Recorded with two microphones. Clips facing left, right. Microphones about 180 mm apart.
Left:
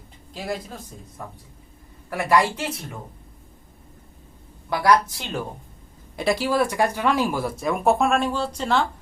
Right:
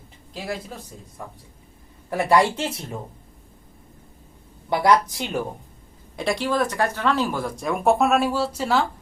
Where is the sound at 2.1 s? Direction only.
25° right (ahead or behind).